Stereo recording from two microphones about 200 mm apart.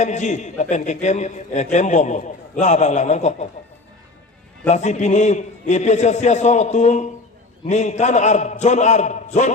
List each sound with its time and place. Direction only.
0.0 s a man's voice: 35° left (ahead or behind)
4.7 s a man's voice: 35° left (ahead or behind)